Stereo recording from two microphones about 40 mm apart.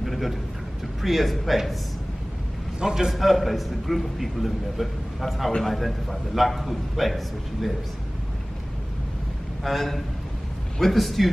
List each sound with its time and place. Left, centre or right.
0.0 s a sound: centre
1.0 s a man's voice: centre
2.8 s a man's voice: centre
3.2 s a man's voice: centre
9.6 s a man's voice: centre